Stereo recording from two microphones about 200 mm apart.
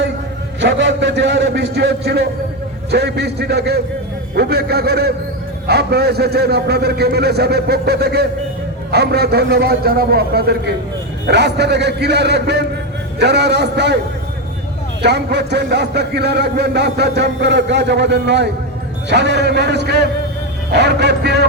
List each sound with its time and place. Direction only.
0.6 s a man's voice: 60° right (ahead or behind)
15.0 s speech: 55° right (ahead or behind)